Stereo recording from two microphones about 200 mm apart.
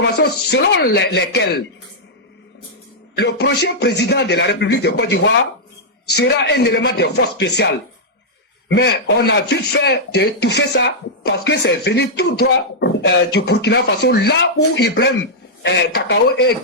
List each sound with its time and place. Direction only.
0.0 s speech: 60° left (ahead or behind)
3.2 s speech: 55° left (ahead or behind)
8.7 s speech: 55° left (ahead or behind)